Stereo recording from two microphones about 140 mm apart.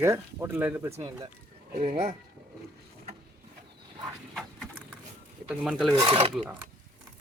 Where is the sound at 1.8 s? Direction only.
45° right (ahead or behind).